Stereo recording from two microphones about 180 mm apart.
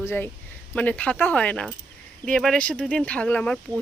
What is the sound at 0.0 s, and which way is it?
Speech, 15° left (ahead or behind).